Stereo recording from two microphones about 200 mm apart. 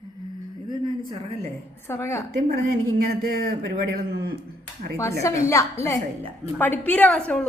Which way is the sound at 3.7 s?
50° right (ahead or behind).